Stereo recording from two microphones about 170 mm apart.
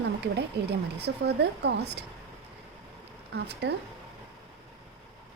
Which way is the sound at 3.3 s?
75° right (ahead or behind).